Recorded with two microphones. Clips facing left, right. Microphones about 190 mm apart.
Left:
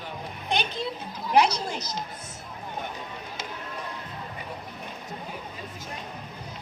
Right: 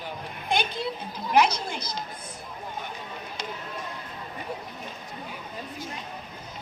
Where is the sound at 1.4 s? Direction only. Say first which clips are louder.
Even; 35° left (ahead or behind).